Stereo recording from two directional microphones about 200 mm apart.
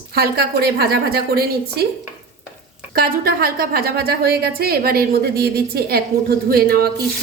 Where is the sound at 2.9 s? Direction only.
50° right (ahead or behind).